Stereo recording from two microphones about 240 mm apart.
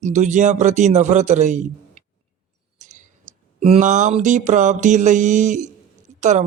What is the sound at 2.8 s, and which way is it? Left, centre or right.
Speech, right.